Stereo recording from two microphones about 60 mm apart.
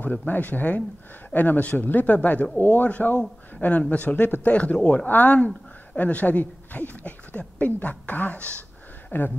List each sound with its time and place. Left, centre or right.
0.3 s speech: left